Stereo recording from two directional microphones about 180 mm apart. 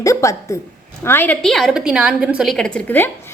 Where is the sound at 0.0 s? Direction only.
15° left (ahead or behind).